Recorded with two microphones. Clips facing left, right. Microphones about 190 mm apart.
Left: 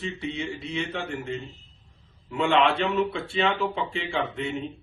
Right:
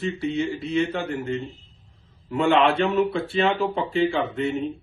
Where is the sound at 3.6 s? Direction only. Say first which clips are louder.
Right 3 dB; 40° right (ahead or behind).